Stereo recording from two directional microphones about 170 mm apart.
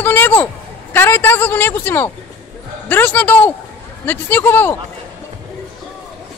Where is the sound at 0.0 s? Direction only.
10° left (ahead or behind).